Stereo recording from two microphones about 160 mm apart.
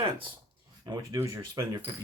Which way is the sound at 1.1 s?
20° right (ahead or behind).